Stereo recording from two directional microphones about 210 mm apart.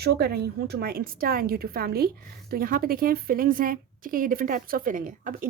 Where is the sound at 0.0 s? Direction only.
50° right (ahead or behind).